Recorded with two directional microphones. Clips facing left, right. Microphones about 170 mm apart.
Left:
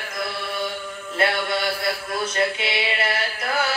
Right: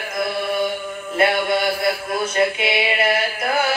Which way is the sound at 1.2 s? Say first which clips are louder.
Right 5 dB; 15° right (ahead or behind).